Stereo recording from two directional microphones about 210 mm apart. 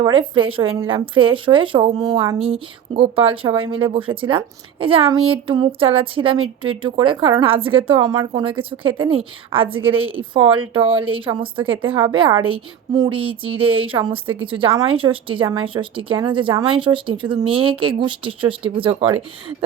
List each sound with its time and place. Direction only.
0.0 s a woman's voice: 25° right (ahead or behind)